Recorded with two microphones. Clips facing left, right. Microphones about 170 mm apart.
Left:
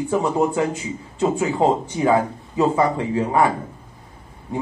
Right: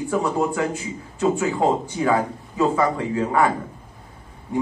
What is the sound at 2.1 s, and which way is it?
Speech, 20° left (ahead or behind).